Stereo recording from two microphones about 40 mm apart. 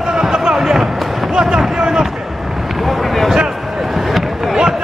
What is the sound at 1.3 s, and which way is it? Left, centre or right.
Fireworks, centre.